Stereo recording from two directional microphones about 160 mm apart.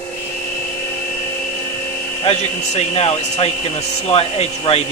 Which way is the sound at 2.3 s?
40° left (ahead or behind).